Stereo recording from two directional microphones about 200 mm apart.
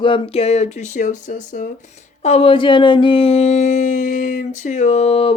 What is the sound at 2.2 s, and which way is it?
Speech, 30° left (ahead or behind).